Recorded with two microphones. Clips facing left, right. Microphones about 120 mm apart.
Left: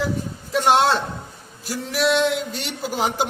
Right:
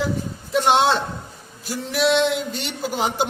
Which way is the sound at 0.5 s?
Centre (ahead or behind).